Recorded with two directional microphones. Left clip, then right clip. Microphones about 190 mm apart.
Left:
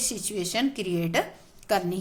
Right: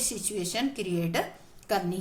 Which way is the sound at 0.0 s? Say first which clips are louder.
Left 2 dB; 25° left (ahead or behind).